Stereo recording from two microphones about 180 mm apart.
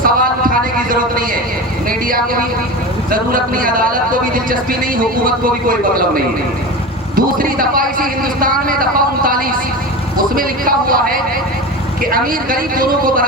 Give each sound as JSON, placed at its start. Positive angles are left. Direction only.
{"t": 0.0, "sound": "a man's voice", "side_deg": -50}